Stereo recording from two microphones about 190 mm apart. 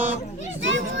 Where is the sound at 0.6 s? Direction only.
75° right (ahead or behind).